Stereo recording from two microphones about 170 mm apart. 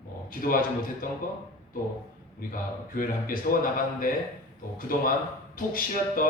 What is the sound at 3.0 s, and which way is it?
A man's voice, 55° left (ahead or behind).